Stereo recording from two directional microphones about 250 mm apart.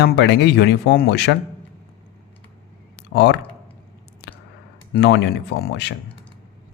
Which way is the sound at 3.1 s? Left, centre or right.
Left.